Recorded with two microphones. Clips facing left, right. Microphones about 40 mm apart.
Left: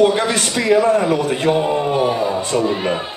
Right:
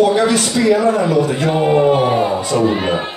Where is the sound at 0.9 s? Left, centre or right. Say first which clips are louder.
Right 1 dB; left.